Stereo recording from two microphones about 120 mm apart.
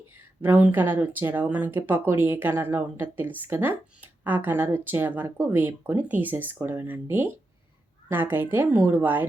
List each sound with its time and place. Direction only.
0.4 s speech: 15° right (ahead or behind)